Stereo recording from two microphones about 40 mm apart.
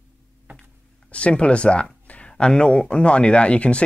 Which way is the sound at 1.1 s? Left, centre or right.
Left.